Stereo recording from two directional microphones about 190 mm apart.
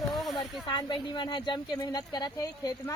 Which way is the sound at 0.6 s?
25° left (ahead or behind).